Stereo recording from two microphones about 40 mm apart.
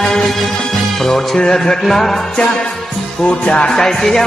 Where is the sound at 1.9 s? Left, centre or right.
Centre.